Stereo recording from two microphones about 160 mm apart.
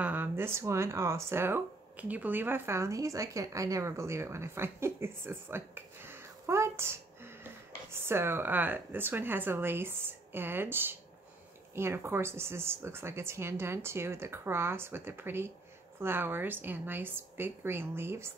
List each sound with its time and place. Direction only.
0.0 s speech: 10° right (ahead or behind)